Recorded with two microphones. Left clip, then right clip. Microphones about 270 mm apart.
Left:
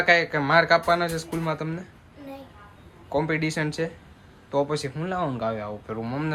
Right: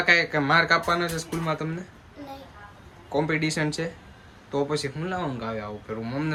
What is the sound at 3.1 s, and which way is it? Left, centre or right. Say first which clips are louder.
Speech: even; centre.